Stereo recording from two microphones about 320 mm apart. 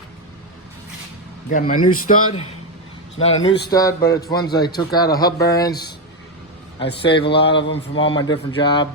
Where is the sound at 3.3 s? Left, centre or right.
Left.